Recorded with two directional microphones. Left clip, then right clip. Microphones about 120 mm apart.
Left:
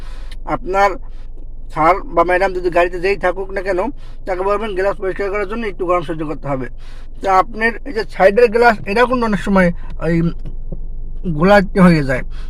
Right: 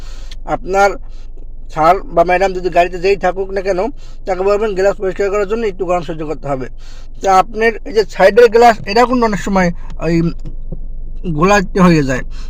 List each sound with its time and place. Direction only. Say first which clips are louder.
0.0 s a sound: right 1 dB; 25° right (ahead or behind)
1.7 s a man's voice: right 2 dB; 30° right (ahead or behind)
11.3 s a man's voice: even; 35° right (ahead or behind)